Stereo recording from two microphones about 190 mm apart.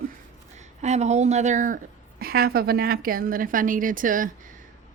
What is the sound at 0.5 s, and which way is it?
A woman's voice, 35° right (ahead or behind).